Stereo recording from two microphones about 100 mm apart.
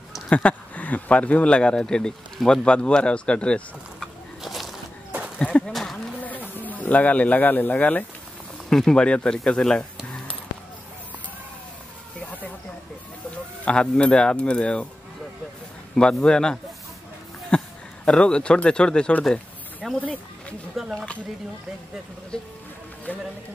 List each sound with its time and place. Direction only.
0.3 s speech: 10° left (ahead or behind)
4.4 s a sound: centre (ahead or behind)
6.6 s speech: 15° left (ahead or behind)
13.7 s speech: 10° left (ahead or behind)
15.9 s speech: 5° left (ahead or behind)
17.5 s a sound: 10° left (ahead or behind)
18.0 s speech: 10° left (ahead or behind)
19.8 s speech: centre (ahead or behind)
20.9 s a sound: 10° left (ahead or behind)
22.3 s speech: 10° left (ahead or behind)